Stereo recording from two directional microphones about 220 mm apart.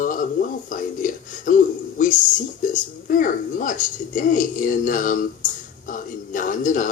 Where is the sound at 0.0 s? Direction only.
35° left (ahead or behind).